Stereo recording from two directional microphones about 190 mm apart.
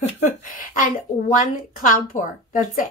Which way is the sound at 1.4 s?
45° left (ahead or behind).